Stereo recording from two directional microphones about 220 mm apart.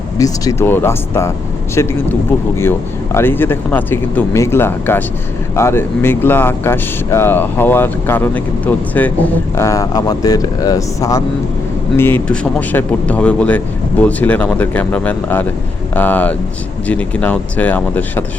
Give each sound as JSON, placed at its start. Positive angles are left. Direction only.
{"t": 0.2, "sound": "speech", "side_deg": 15}
{"t": 3.2, "sound": "speech", "side_deg": 10}